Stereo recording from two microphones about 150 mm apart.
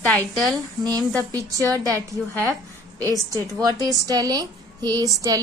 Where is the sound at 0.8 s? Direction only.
25° right (ahead or behind).